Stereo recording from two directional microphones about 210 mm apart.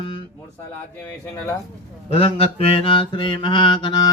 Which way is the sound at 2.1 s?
25° left (ahead or behind).